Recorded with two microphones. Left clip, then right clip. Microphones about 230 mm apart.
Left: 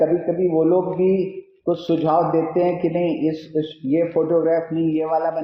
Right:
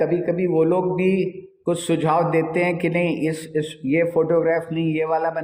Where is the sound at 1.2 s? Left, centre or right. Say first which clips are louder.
Even; right.